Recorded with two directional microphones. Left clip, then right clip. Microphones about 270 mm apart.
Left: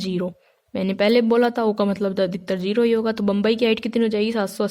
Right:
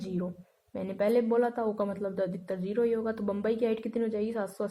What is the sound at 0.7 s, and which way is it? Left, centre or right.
A man's voice, left.